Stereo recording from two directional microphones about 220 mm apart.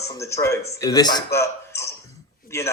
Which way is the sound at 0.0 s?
15° left (ahead or behind).